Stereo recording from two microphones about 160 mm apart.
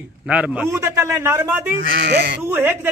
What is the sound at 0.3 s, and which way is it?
A man's voice, 5° right (ahead or behind).